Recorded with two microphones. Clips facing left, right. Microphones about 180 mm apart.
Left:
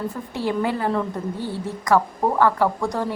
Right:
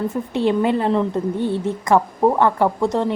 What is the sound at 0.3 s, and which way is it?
A woman's voice, 20° right (ahead or behind).